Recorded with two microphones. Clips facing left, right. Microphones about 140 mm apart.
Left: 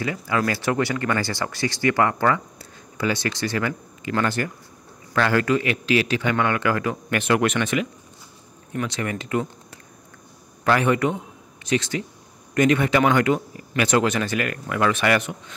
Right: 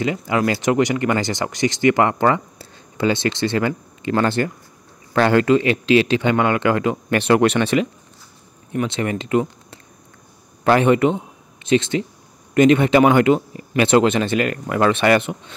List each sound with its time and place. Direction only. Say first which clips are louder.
0.0 s speech: right 4 dB; 20° right (ahead or behind)